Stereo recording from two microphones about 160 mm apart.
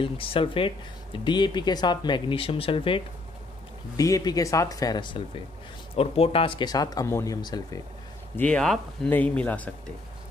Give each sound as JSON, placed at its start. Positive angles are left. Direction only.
{"t": 0.0, "sound": "speech", "side_deg": 35}
{"t": 3.9, "sound": "speech", "side_deg": 20}
{"t": 8.4, "sound": "speech", "side_deg": 5}